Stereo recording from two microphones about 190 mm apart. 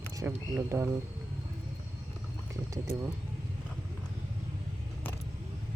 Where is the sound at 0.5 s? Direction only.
15° right (ahead or behind).